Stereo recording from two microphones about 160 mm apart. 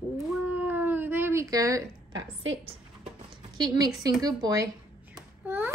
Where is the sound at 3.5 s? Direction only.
25° right (ahead or behind).